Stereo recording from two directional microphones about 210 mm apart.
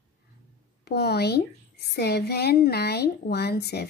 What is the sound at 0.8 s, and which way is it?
Speech, 50° left (ahead or behind).